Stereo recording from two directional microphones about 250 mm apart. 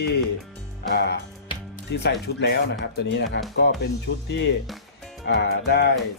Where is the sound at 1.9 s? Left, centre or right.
Left.